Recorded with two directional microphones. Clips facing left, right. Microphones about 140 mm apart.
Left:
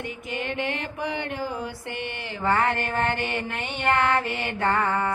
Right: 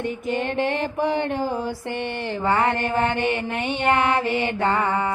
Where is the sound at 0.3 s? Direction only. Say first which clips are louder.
Right 6 dB; 45° right (ahead or behind).